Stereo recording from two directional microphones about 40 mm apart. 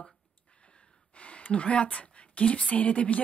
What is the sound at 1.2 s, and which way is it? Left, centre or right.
Speech, left.